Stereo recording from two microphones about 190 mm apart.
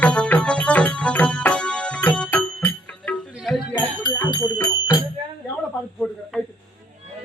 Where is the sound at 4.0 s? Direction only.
20° left (ahead or behind).